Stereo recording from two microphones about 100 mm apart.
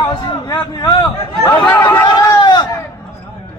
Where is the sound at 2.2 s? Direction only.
40° left (ahead or behind).